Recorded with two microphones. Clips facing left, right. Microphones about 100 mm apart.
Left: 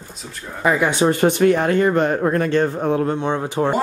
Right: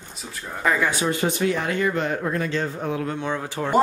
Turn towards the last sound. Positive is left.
turn(degrees=20)  # may be behind; listen again after turning